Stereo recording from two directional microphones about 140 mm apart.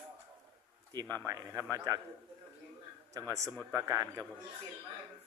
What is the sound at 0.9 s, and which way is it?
Speech, 30° right (ahead or behind).